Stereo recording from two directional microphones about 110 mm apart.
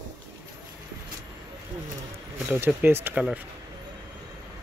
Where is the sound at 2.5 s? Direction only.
20° right (ahead or behind).